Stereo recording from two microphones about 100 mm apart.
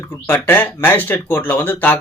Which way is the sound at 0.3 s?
20° left (ahead or behind).